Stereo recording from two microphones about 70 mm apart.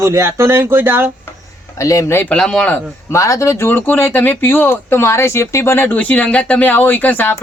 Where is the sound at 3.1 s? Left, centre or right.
Left.